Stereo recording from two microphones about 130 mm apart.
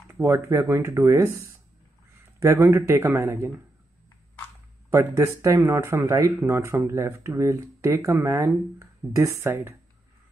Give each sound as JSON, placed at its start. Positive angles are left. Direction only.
{"t": 0.1, "sound": "speech", "side_deg": -20}
{"t": 4.9, "sound": "speech", "side_deg": -25}